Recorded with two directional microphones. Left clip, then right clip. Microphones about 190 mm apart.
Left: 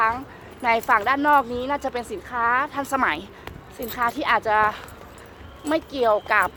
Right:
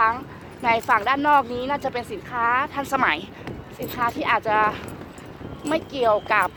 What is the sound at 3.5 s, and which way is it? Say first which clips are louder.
Speech: left 1 dB; 5° right (ahead or behind).